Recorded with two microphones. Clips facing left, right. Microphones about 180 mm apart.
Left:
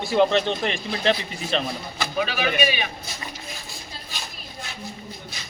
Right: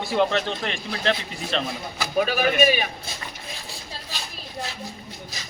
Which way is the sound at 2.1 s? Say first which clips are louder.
Right 4 dB; 45° right (ahead or behind).